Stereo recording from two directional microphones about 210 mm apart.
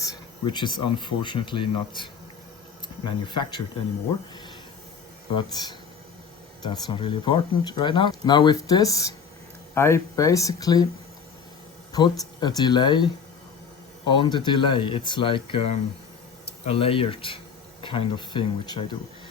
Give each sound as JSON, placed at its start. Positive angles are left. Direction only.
{"t": 0.4, "sound": "speech", "side_deg": 20}
{"t": 5.3, "sound": "speech", "side_deg": 20}
{"t": 11.9, "sound": "speech", "side_deg": 20}
{"t": 14.1, "sound": "speech", "side_deg": 20}